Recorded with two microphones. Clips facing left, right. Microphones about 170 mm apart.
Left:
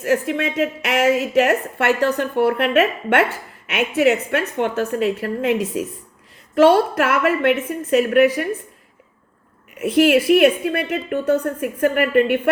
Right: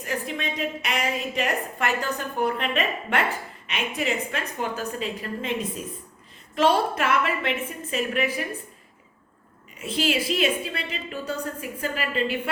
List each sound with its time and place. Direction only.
0.0 s a woman's voice: 75° left (ahead or behind)
9.7 s a woman's voice: 60° left (ahead or behind)